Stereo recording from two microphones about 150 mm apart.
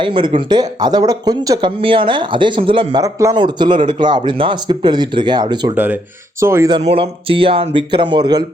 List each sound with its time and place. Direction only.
0.0 s speech: 30° right (ahead or behind)
3.3 s speech: 30° right (ahead or behind)
5.7 s speech: 10° right (ahead or behind)
6.8 s speech: 40° right (ahead or behind)